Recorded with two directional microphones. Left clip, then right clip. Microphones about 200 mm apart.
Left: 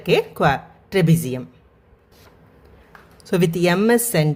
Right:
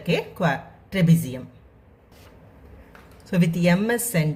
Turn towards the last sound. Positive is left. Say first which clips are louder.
# left 7 dB
turn(degrees=50)  # may be behind; listen again after turning